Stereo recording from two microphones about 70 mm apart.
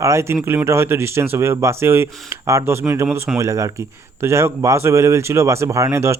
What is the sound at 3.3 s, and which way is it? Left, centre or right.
Speech, right.